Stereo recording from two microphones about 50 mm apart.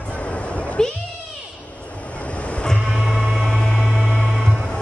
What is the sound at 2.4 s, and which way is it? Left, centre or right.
Vehicle, left.